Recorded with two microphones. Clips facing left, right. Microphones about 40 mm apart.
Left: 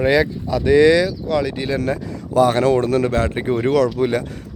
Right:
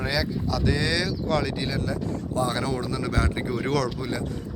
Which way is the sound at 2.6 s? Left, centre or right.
Left.